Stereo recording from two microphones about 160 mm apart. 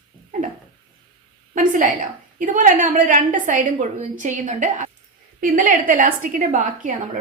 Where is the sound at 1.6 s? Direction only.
55° right (ahead or behind).